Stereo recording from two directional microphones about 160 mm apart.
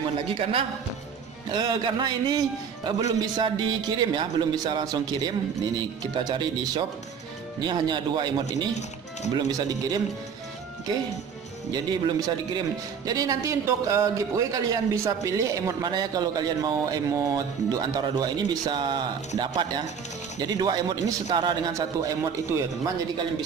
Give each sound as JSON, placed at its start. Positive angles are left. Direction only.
{"t": 0.3, "sound": "a man's voice", "side_deg": -35}
{"t": 8.7, "sound": "speech", "side_deg": 45}
{"t": 9.5, "sound": "speech", "side_deg": -20}
{"t": 11.7, "sound": "speech", "side_deg": -25}